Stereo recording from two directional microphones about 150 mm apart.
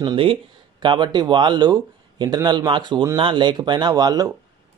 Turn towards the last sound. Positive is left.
turn(degrees=-25)  # may be behind; listen again after turning